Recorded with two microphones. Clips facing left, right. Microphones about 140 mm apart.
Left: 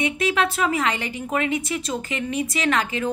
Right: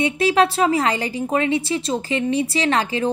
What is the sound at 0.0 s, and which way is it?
A woman's voice, 35° right (ahead or behind).